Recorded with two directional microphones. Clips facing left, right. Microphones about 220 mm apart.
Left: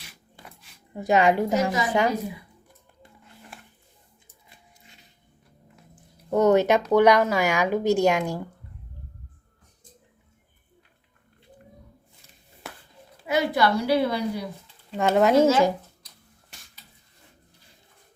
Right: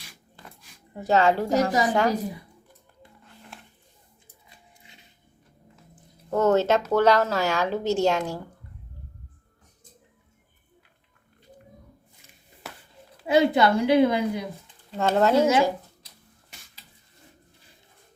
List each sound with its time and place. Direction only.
0.9 s speech: 15° left (ahead or behind)
6.3 s speech: 15° left (ahead or behind)
12.7 s a sound: centre (ahead or behind)
13.2 s a woman's voice: 25° right (ahead or behind)
14.9 s speech: 15° left (ahead or behind)
15.4 s speech: 15° right (ahead or behind)